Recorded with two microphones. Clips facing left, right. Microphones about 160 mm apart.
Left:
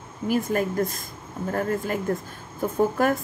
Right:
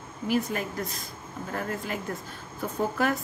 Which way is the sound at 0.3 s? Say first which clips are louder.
Left 4 dB; 45° left (ahead or behind).